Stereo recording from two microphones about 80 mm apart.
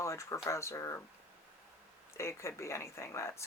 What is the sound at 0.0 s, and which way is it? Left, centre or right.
Speech, left.